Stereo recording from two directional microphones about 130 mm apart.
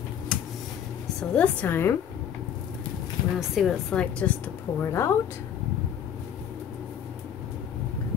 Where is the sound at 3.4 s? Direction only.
Centre (ahead or behind).